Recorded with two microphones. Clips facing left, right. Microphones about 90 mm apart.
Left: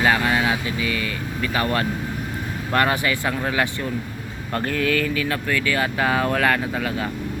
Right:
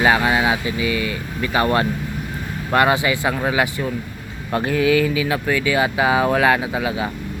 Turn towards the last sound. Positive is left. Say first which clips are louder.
# right 3 dB
turn(degrees=-10)  # may be behind; listen again after turning